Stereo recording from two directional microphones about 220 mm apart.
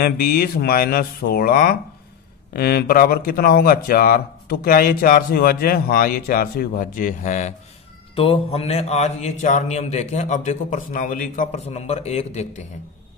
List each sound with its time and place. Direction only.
0.0 s speech: 40° left (ahead or behind)